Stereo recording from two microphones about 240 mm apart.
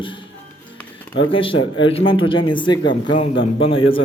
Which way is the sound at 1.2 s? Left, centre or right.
Left.